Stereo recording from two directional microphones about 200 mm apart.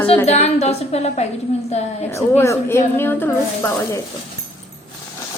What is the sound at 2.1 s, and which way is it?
A woman's voice, 15° left (ahead or behind).